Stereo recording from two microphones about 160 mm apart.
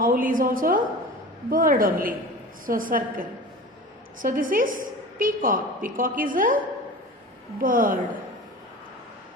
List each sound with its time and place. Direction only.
0.0 s a woman's voice: 60° right (ahead or behind)
7.6 s a woman's voice: 60° right (ahead or behind)